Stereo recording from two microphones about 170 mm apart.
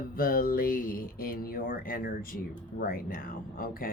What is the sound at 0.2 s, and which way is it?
Speech, 60° left (ahead or behind).